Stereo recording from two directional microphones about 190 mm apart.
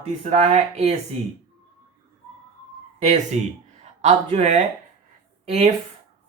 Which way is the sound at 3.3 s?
35° right (ahead or behind).